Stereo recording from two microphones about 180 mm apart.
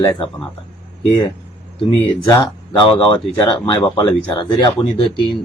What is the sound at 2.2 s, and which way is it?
Speech, 20° left (ahead or behind).